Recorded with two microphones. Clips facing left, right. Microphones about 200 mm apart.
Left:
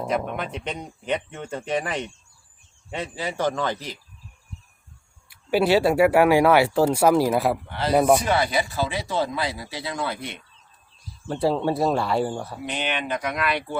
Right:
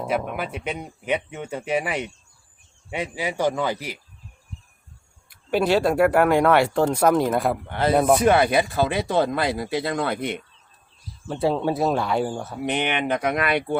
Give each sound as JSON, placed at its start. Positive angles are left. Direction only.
{"t": 0.3, "sound": "speech", "side_deg": -5}
{"t": 5.3, "sound": "speech", "side_deg": 5}
{"t": 7.7, "sound": "speech", "side_deg": -50}
{"t": 7.9, "sound": "speech", "side_deg": 0}
{"t": 8.2, "sound": "speech", "side_deg": -55}
{"t": 11.3, "sound": "speech", "side_deg": 0}
{"t": 12.6, "sound": "speech", "side_deg": -60}